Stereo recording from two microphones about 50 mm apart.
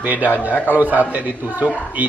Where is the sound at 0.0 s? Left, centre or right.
Right.